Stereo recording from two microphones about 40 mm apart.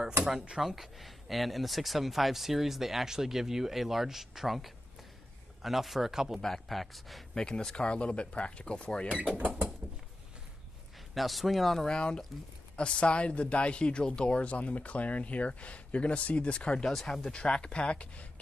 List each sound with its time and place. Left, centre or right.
0.6 s speech: centre
6.4 s speech: centre
7.3 s speech: centre
11.1 s speech: centre
11.9 s speech: left
16.8 s speech: centre
17.3 s speech: left